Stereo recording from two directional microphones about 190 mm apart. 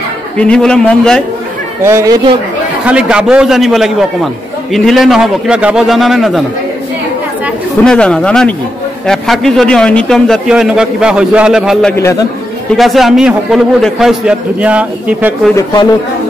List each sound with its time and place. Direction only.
0.4 s a man's voice: 5° left (ahead or behind)
1.8 s a man's voice: 15° right (ahead or behind)
7.8 s a man's voice: 5° left (ahead or behind)
12.0 s a man's voice: 15° left (ahead or behind)
12.7 s a man's voice: centre (ahead or behind)
15.5 s speech: 20° left (ahead or behind)